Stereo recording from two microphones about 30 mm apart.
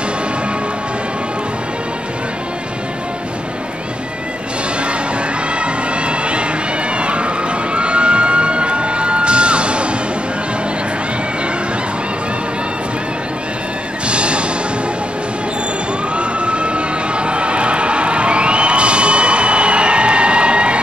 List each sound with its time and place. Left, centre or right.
5.6 s music: right
14.0 s music: right
16.2 s a sound: right